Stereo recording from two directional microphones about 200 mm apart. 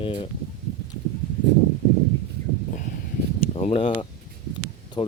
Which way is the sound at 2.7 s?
40° left (ahead or behind).